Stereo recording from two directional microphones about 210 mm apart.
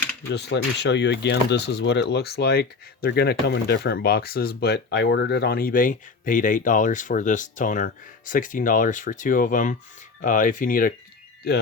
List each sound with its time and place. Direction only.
0.3 s speech: 55° left (ahead or behind)